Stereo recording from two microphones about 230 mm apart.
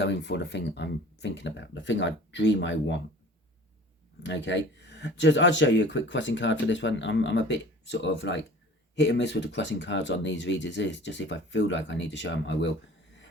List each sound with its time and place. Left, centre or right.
0.0 s speech: left
4.2 s speech: left